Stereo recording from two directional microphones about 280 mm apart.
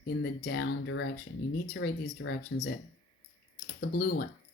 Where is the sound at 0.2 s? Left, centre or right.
Left.